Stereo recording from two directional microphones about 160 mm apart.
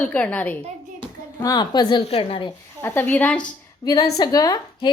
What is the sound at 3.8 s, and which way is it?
A woman's voice, 25° left (ahead or behind).